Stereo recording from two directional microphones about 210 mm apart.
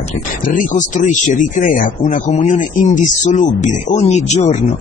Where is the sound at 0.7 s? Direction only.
35° left (ahead or behind).